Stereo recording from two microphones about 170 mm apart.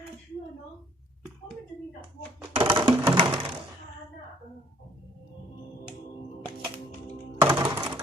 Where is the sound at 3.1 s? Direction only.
30° right (ahead or behind).